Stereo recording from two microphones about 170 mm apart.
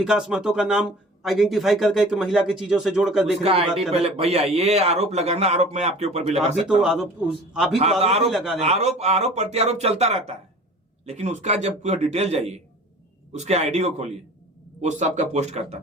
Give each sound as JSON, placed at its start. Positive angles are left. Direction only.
{"t": 0.0, "sound": "speech", "side_deg": -5}
{"t": 3.4, "sound": "a man's voice", "side_deg": -35}
{"t": 6.7, "sound": "speech", "side_deg": -5}
{"t": 8.0, "sound": "a man's voice", "side_deg": -35}
{"t": 8.3, "sound": "speech", "side_deg": 0}
{"t": 8.6, "sound": "a man's voice", "side_deg": -40}